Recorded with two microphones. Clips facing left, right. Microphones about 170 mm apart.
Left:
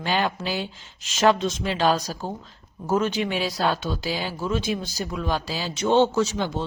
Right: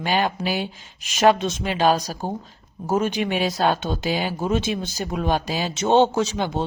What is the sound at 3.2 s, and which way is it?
Speech, 55° right (ahead or behind).